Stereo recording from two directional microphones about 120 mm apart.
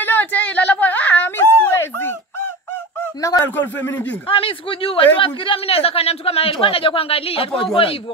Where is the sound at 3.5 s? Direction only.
15° left (ahead or behind).